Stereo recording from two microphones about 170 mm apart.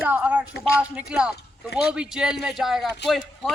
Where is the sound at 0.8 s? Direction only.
5° right (ahead or behind).